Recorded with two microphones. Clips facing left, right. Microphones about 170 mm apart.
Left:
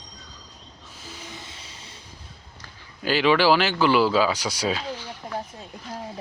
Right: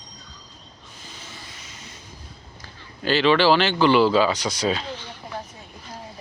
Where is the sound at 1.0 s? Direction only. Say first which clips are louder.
Left 3 dB; 10° left (ahead or behind); by 2.0 s 30° left (ahead or behind).